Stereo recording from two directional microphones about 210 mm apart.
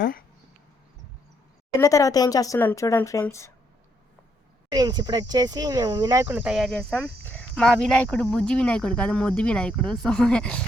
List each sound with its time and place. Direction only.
0.0 s a sound: 45° left (ahead or behind)
1.8 s speech: 15° left (ahead or behind)
4.7 s speech: 20° right (ahead or behind)
6.2 s speech: 5° right (ahead or behind)